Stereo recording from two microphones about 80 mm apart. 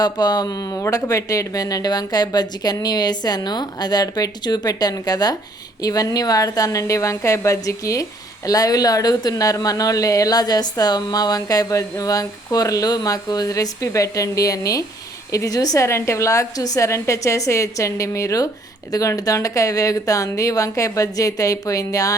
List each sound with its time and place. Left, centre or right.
0.0 s a woman's voice: left